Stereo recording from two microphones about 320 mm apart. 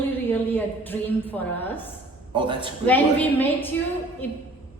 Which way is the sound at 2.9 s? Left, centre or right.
Centre.